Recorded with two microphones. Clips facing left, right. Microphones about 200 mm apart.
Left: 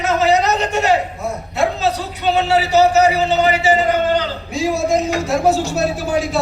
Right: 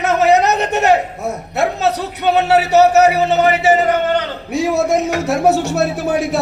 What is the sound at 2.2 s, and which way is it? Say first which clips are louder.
A man's voice: right 2 dB; 60° right (ahead or behind).